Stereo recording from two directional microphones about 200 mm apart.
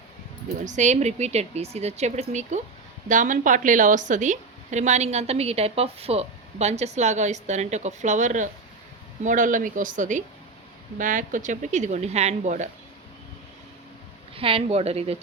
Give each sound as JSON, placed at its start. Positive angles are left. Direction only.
{"t": 0.4, "sound": "a woman's voice", "side_deg": -35}
{"t": 14.3, "sound": "a woman's voice", "side_deg": -25}